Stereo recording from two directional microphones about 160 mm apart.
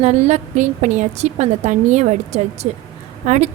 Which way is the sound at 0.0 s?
45° right (ahead or behind).